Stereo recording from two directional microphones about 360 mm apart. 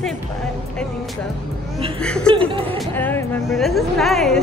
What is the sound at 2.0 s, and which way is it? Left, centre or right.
A woman's voice, centre.